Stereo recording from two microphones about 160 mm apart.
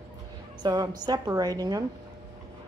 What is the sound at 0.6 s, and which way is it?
A woman's voice, 25° right (ahead or behind).